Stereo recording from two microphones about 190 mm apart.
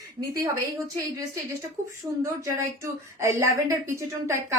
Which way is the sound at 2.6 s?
15° right (ahead or behind).